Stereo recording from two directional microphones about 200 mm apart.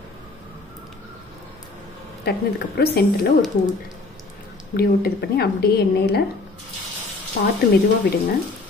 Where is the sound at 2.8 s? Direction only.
50° left (ahead or behind).